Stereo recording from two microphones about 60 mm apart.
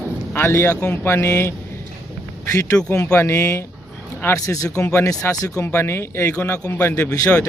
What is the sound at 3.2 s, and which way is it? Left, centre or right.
Speech, left.